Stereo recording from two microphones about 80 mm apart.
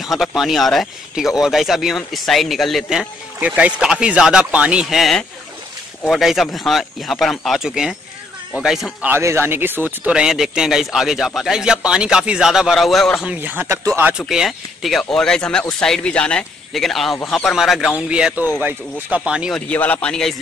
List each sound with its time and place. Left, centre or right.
0.0 s speech: centre
3.3 s a man's voice: centre
4.8 s speech: centre
9.2 s speech: right
10.0 s a man's voice: centre
13.4 s speech: right
13.7 s speech: right
14.0 s speech: centre
16.7 s speech: centre
17.9 s a man's voice: centre
19.7 s speech: centre